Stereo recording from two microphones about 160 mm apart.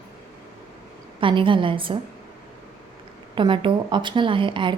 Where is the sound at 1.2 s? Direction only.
30° right (ahead or behind).